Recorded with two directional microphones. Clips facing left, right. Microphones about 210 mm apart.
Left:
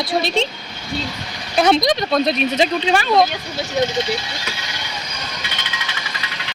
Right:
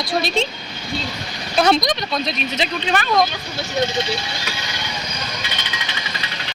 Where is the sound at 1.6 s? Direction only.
20° left (ahead or behind).